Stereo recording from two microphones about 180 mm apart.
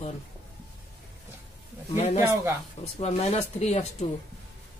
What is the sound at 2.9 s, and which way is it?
Speech, 35° left (ahead or behind).